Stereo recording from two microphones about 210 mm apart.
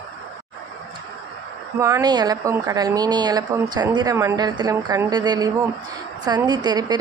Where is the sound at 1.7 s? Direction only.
15° right (ahead or behind).